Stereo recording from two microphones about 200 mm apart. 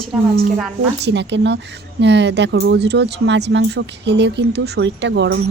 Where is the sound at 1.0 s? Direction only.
60° right (ahead or behind).